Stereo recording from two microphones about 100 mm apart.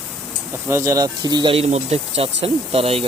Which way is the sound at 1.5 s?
90° right.